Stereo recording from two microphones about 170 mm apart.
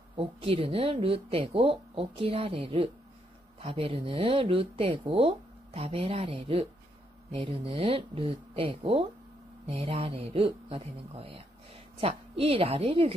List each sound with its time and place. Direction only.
0.2 s a woman's voice: 35° right (ahead or behind)